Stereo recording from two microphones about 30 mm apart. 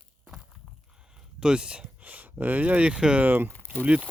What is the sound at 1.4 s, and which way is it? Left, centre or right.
Speech, right.